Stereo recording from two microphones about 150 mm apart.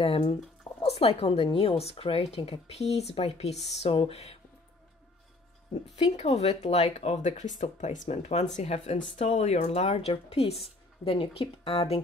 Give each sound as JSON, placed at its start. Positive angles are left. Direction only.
{"t": 0.0, "sound": "speech", "side_deg": 40}
{"t": 6.1, "sound": "a woman's voice", "side_deg": 45}
{"t": 7.2, "sound": "a woman's voice", "side_deg": 55}